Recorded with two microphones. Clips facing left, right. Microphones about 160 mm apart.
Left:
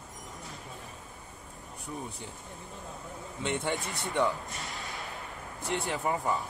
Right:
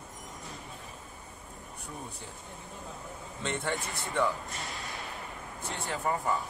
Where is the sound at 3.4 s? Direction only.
20° left (ahead or behind).